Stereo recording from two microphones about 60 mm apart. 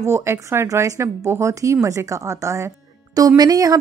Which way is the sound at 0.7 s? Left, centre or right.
Right.